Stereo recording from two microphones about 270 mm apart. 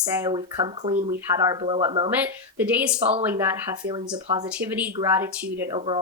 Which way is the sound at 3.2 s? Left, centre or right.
Centre.